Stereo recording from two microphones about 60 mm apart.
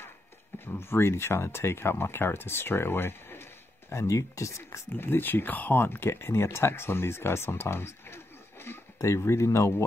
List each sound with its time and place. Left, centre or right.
0.7 s speech: left
3.9 s speech: left
4.9 s speech: left